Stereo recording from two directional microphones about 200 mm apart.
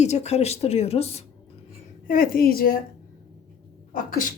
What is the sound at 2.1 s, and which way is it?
Speech, 45° left (ahead or behind).